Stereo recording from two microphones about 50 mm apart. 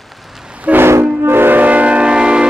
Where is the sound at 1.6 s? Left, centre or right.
Right.